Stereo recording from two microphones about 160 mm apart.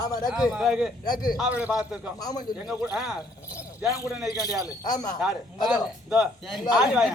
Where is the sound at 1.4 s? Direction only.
10° right (ahead or behind).